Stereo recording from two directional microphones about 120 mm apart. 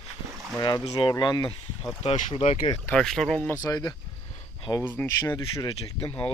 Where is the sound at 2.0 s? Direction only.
60° left (ahead or behind).